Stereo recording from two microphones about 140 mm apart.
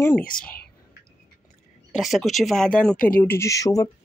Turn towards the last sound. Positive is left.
turn(degrees=25)  # may be behind; listen again after turning